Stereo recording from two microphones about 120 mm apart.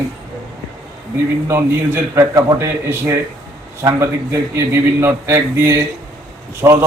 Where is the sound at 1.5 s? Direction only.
20° right (ahead or behind).